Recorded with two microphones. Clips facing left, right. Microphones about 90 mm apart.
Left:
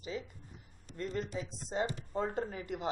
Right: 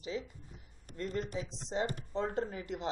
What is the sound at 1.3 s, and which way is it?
Speech, 45° left (ahead or behind).